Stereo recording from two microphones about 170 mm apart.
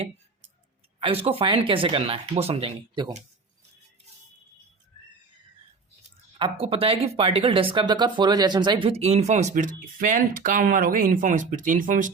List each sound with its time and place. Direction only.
1.0 s speech: 35° right (ahead or behind)
6.4 s speech: 35° right (ahead or behind); by 12.1 s 50° right (ahead or behind)